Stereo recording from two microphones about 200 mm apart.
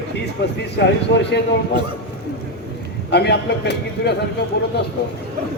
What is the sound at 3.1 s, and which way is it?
A man's voice, 55° left (ahead or behind).